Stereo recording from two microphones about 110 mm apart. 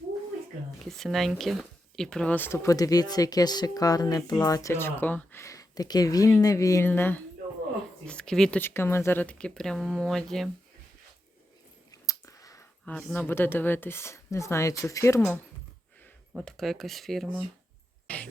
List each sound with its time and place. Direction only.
0.9 s speech: centre (ahead or behind)
2.6 s speech: 35° left (ahead or behind)
6.8 s speech: 20° left (ahead or behind)
8.0 s speech: 10° left (ahead or behind)
11.9 s a sound: 30° left (ahead or behind)
12.8 s speech: 10° left (ahead or behind); by 15.2 s 30° left (ahead or behind)
16.4 s speech: 5° left (ahead or behind)
18.1 s a sound: 10° left (ahead or behind)